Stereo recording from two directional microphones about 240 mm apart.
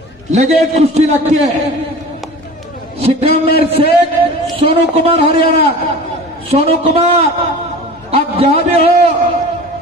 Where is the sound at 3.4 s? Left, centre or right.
Right.